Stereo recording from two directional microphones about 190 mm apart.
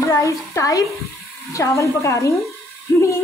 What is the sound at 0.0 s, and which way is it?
Speech, 15° left (ahead or behind).